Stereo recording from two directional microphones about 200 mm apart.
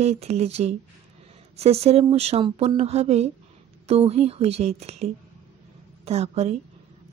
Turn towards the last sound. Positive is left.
turn(degrees=-35)  # may be behind; listen again after turning